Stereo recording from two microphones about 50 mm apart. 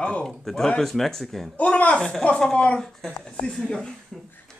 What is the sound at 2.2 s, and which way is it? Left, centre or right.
A man's voice, centre.